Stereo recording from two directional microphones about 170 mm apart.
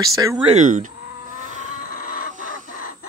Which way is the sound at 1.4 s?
45° right (ahead or behind).